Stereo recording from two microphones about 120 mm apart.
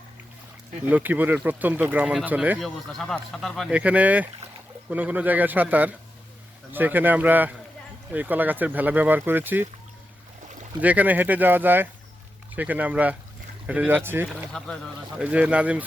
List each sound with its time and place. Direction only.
0.9 s speech: 15° right (ahead or behind)
2.6 s a man's voice: centre (ahead or behind)
3.7 s speech: 10° right (ahead or behind)
10.8 s speech: 15° right (ahead or behind)
14.5 s speech: 5° left (ahead or behind)
15.2 s speech: 10° right (ahead or behind)